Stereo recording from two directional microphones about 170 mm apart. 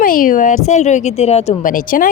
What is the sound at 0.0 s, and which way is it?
Speech, 55° left (ahead or behind).